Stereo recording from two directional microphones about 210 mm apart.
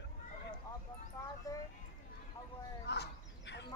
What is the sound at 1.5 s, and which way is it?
Speech, 15° left (ahead or behind).